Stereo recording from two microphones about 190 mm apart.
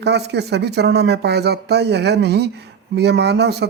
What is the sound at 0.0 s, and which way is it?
Speech, 60° right (ahead or behind).